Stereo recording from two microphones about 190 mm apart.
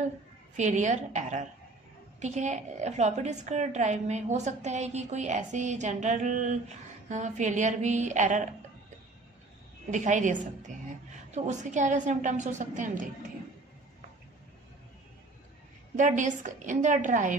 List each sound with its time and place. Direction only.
0.6 s a woman's voice: 40° right (ahead or behind)
9.8 s a woman's voice: 40° right (ahead or behind)
16.0 s a woman's voice: 40° right (ahead or behind)